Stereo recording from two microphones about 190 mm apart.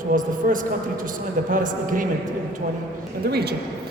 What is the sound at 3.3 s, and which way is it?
Speech, 55° right (ahead or behind).